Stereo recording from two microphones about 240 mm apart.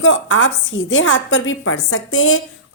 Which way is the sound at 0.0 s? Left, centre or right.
Left.